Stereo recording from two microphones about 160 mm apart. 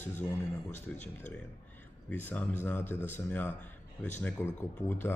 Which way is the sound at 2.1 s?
10° left (ahead or behind).